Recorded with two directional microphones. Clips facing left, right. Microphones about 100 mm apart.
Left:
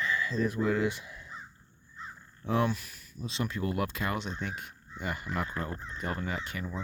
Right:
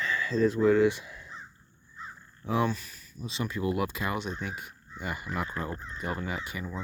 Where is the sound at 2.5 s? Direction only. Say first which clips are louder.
Right 1 dB; centre (ahead or behind).